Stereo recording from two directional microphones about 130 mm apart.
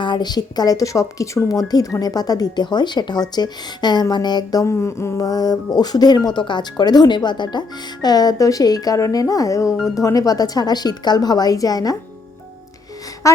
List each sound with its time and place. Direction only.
0.0 s speech: 35° left (ahead or behind)
4.6 s speech: 20° left (ahead or behind)
13.2 s gasp: 25° left (ahead or behind)